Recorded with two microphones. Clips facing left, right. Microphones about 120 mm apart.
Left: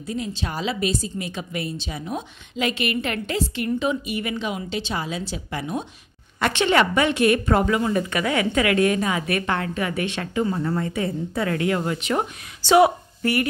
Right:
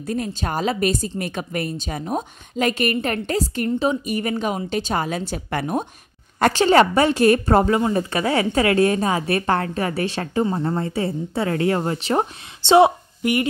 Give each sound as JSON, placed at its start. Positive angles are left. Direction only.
{"t": 0.0, "sound": "a woman's voice", "side_deg": -50}
{"t": 6.4, "sound": "a woman's voice", "side_deg": -35}